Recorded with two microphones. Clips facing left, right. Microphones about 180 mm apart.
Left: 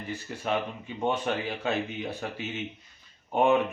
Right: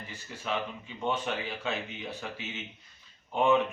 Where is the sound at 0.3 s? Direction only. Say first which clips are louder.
Left 3 dB; 45° left (ahead or behind).